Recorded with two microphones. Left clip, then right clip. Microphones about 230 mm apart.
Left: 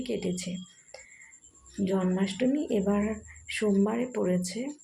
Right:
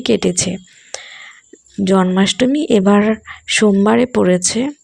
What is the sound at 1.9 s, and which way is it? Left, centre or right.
Speech, right.